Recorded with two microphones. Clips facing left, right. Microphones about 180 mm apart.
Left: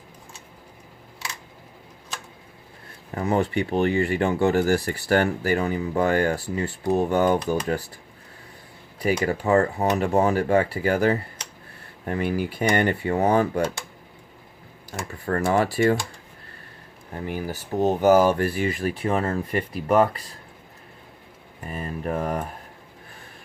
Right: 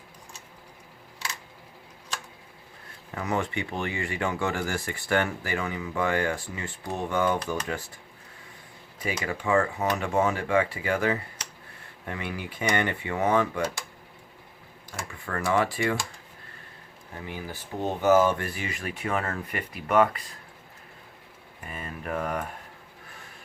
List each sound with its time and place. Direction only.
3.2 s speech: 35° left (ahead or behind)
9.2 s speech: 40° left (ahead or behind)
14.9 s speech: 40° left (ahead or behind)
17.2 s speech: 40° left (ahead or behind)
21.7 s speech: 35° left (ahead or behind)